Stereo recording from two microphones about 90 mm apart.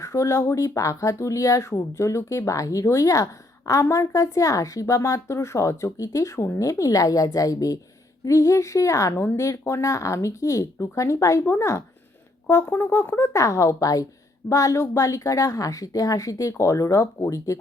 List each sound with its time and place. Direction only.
0.0 s speech: 35° left (ahead or behind)